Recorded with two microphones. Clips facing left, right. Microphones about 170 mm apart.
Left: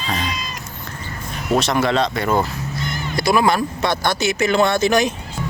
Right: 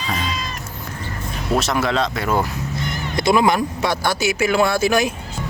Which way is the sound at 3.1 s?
20° right (ahead or behind).